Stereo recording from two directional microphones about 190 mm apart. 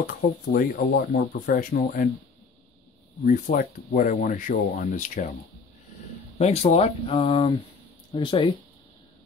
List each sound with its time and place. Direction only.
0.0 s speech: 50° left (ahead or behind)
3.3 s speech: 45° left (ahead or behind)
6.3 s speech: 35° left (ahead or behind)